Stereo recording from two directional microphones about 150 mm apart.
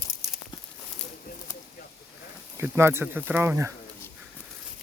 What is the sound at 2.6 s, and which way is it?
Speech, 15° right (ahead or behind).